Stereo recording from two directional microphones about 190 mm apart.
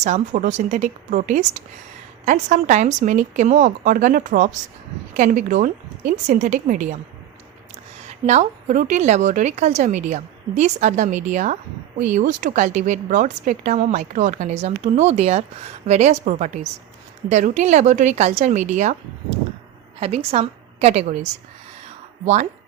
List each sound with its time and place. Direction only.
0.0 s a woman's voice: 40° right (ahead or behind)
8.3 s speech: 40° right (ahead or behind)
20.0 s speech: 35° right (ahead or behind)